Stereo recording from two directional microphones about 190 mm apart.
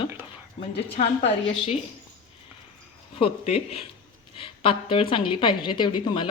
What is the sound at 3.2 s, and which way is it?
A woman's voice, 35° left (ahead or behind).